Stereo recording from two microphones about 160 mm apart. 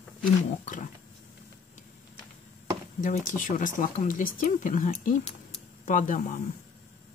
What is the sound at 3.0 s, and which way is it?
Speech, 55° left (ahead or behind).